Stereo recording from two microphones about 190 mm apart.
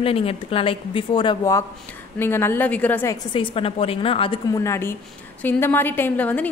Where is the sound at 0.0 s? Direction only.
30° left (ahead or behind).